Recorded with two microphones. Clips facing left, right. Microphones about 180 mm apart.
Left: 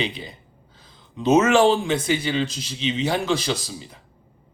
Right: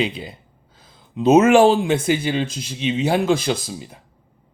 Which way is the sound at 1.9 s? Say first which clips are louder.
Right 3 dB; 50° right (ahead or behind).